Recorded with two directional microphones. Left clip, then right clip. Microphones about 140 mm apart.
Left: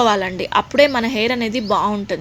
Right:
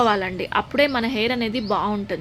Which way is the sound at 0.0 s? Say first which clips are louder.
Left 4 dB; 25° left (ahead or behind).